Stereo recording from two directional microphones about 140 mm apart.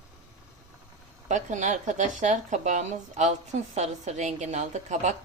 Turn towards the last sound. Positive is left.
turn(degrees=-55)  # may be behind; listen again after turning